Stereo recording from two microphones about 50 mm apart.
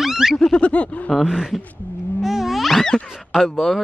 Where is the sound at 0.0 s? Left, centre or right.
Centre.